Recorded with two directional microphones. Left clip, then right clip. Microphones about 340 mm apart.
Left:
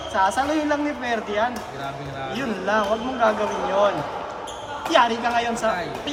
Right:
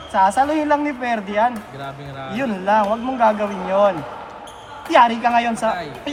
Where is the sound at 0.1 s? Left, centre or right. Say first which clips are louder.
Right 5 dB; centre.